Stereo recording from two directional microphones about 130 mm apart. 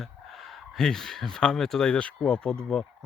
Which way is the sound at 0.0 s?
Centre (ahead or behind).